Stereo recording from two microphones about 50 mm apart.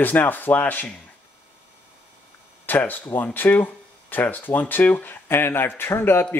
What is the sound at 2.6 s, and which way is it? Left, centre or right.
Speech, left.